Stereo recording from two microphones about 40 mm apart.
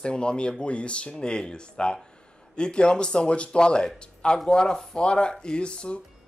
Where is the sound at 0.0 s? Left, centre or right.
Left.